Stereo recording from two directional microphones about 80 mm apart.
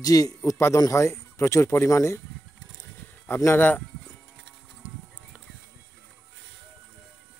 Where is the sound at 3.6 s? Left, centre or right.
Left.